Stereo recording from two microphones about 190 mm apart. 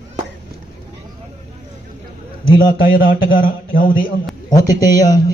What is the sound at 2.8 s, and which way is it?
Speech, 50° left (ahead or behind).